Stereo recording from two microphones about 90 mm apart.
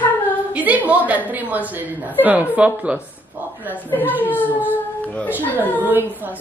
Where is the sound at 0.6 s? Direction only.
15° right (ahead or behind).